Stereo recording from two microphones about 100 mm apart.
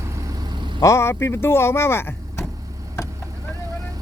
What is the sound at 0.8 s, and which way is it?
Speech, 30° left (ahead or behind).